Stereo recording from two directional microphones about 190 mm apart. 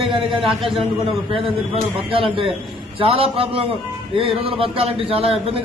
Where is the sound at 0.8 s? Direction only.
25° right (ahead or behind).